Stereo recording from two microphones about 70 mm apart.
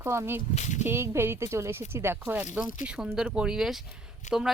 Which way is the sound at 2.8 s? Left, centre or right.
Centre.